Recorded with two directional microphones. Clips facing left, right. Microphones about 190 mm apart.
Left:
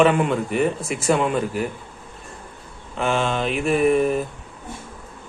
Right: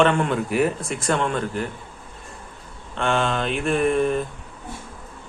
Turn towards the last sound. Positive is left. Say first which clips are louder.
# left 2 dB
turn(degrees=5)  # may be behind; listen again after turning